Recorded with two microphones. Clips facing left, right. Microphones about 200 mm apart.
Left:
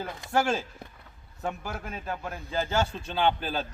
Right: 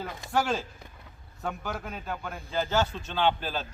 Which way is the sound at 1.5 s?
5° left (ahead or behind).